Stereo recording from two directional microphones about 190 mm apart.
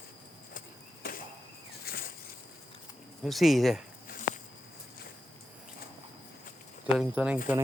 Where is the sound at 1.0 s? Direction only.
50° left (ahead or behind).